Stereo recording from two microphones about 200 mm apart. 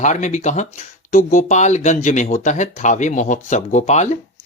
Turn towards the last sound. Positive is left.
turn(degrees=35)  # may be behind; listen again after turning